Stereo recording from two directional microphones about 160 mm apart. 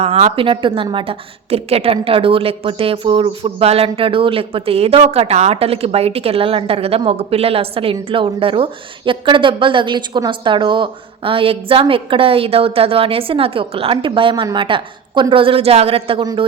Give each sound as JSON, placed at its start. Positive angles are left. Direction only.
{"t": 0.0, "sound": "a woman's voice", "side_deg": -40}